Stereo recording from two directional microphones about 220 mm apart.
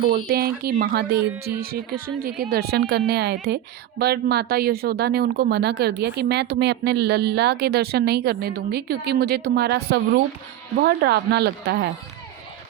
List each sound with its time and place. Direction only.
0.0 s speech: 45° right (ahead or behind)